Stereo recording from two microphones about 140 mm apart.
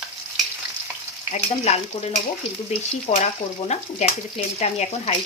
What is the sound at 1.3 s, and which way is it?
Speech, 50° left (ahead or behind).